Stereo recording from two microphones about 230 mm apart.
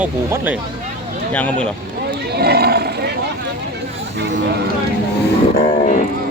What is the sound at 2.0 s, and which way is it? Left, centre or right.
Roaring cats, right.